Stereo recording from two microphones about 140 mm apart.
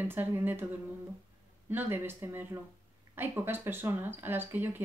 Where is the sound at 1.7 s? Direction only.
15° right (ahead or behind).